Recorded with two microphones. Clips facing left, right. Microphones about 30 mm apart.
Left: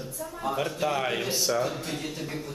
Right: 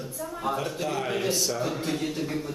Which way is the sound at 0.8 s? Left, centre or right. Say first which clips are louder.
Even; centre.